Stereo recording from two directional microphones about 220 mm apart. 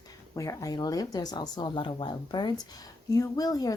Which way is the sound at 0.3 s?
15° left (ahead or behind).